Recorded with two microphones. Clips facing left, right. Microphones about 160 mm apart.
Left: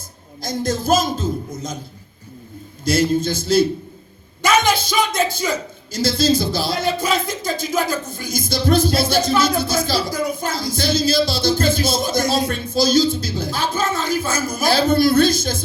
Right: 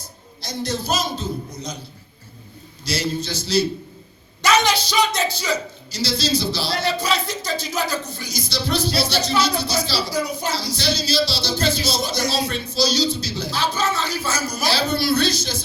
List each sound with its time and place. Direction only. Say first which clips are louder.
0.4 s speech: left 5 dB; 50° left (ahead or behind)
2.8 s speech: left 8 dB; 50° left (ahead or behind)